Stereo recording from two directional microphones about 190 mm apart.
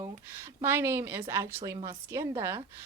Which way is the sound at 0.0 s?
15° right (ahead or behind).